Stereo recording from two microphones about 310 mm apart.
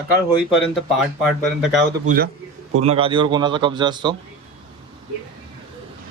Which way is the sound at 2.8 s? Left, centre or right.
Centre.